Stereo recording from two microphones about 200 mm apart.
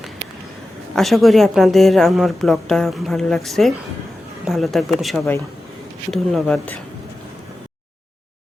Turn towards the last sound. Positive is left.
turn(degrees=5)  # may be behind; listen again after turning